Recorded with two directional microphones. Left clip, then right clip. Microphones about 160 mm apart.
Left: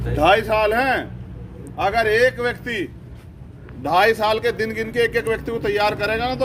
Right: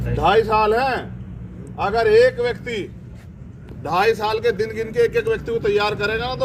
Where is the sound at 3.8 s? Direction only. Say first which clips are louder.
Left 2 dB; 40° left (ahead or behind).